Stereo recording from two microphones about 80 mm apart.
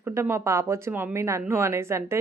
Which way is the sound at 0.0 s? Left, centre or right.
Right.